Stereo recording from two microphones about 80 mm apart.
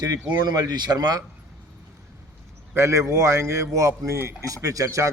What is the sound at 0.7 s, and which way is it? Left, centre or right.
Speech, right.